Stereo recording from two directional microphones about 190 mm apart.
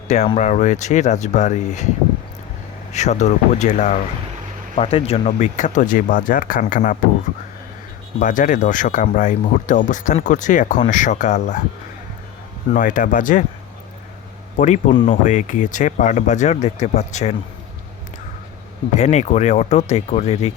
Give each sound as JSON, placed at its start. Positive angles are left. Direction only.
{"t": 0.3, "sound": "speech", "side_deg": 40}
{"t": 2.9, "sound": "speech", "side_deg": 35}
{"t": 8.2, "sound": "speech", "side_deg": 40}
{"t": 12.7, "sound": "speech", "side_deg": 45}
{"t": 14.6, "sound": "speech", "side_deg": 40}
{"t": 18.9, "sound": "speech", "side_deg": 40}